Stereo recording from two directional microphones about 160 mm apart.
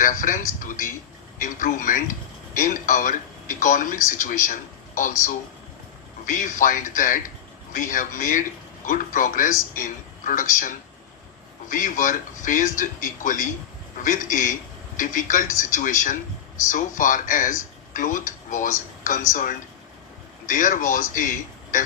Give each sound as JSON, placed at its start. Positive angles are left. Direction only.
{"t": 0.0, "sound": "speech", "side_deg": 55}
{"t": 6.2, "sound": "a man's voice", "side_deg": 55}